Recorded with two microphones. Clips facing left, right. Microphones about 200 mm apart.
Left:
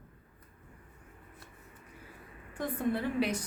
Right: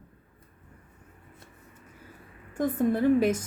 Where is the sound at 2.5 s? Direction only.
45° right (ahead or behind).